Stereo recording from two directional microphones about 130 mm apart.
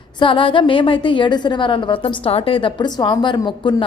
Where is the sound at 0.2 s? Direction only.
40° left (ahead or behind).